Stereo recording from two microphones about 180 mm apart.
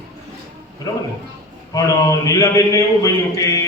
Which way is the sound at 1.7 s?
20° left (ahead or behind).